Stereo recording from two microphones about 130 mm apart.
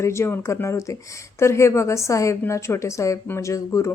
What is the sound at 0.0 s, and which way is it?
Speech, 20° left (ahead or behind).